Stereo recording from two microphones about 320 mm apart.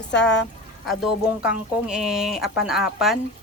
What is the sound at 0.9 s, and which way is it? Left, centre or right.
Speech, centre.